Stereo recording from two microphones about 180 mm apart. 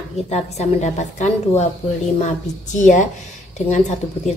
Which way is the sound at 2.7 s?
45° left (ahead or behind).